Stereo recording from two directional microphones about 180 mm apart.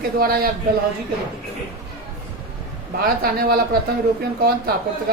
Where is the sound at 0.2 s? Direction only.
55° right (ahead or behind).